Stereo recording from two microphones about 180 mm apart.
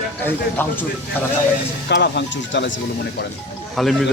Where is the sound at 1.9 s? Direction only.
75° left (ahead or behind); by 2.8 s 90° left.